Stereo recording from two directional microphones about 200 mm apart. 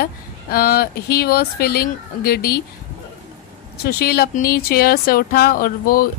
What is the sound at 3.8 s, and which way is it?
Speech, 50° left (ahead or behind).